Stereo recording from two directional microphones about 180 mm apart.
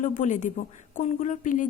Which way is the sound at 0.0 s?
45° left (ahead or behind).